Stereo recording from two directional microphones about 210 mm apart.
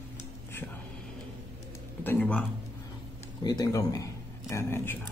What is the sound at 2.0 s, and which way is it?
Speech, 10° left (ahead or behind).